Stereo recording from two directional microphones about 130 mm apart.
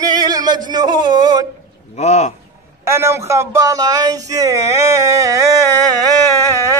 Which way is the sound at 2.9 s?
20° right (ahead or behind).